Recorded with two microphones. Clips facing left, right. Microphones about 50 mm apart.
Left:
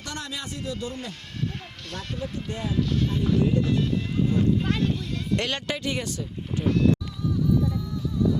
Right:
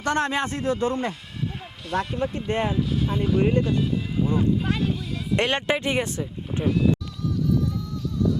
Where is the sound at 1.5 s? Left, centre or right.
Centre.